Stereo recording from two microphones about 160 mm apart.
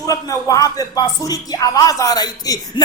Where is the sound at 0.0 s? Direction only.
20° left (ahead or behind).